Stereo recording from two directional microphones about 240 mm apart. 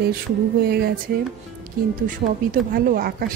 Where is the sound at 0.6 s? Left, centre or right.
Right.